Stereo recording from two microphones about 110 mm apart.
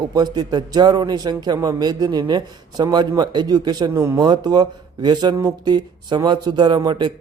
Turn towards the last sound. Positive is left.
turn(degrees=-40)  # may be behind; listen again after turning